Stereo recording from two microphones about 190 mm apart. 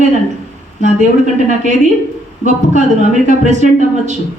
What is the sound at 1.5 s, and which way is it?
Speech, 40° right (ahead or behind).